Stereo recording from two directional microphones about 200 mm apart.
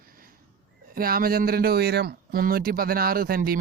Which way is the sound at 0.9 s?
45° right (ahead or behind).